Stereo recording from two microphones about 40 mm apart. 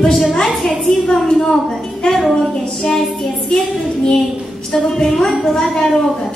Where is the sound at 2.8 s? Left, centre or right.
Centre.